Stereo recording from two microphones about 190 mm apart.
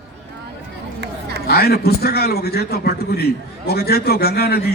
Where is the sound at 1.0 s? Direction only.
60° right (ahead or behind).